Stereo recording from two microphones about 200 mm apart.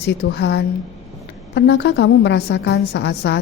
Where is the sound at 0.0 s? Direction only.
55° left (ahead or behind).